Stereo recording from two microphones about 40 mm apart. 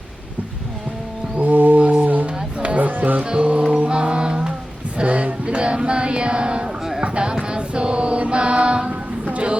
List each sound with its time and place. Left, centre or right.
1.4 s music: right
2.2 s music: right
3.2 s music: right
4.9 s music: right
7.0 s clip-clop: right
7.4 s a sound: right